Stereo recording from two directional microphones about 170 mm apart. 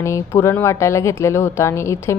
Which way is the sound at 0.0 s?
15° left (ahead or behind).